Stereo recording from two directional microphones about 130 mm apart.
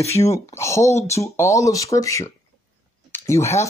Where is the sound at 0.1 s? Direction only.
25° left (ahead or behind).